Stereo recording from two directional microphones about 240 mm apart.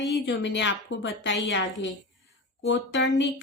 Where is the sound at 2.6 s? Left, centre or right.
Left.